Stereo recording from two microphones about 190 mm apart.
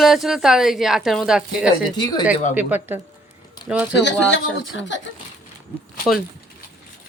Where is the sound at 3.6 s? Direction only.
20° left (ahead or behind).